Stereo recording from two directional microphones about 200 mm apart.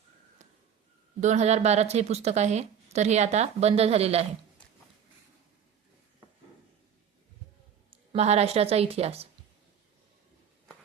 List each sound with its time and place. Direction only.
1.2 s a woman's voice: 35° right (ahead or behind)
7.9 s speech: 30° right (ahead or behind)